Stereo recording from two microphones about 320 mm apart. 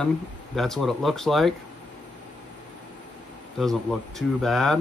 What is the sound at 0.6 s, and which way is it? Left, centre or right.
Speech, centre.